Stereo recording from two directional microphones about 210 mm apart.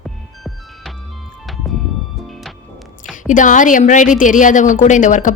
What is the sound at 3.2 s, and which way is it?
Speech, 35° left (ahead or behind).